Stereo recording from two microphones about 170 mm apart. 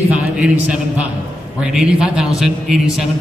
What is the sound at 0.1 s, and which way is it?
A man's voice, 5° right (ahead or behind).